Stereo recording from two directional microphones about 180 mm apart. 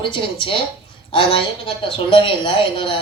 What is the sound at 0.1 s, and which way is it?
A woman's voice, 30° left (ahead or behind).